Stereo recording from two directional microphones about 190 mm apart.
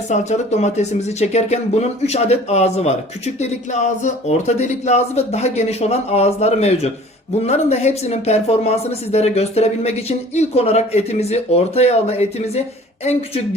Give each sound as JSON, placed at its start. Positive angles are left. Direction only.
{"t": 0.1, "sound": "a woman's voice", "side_deg": 35}